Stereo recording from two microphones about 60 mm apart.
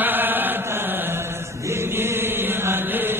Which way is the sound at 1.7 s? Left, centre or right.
Right.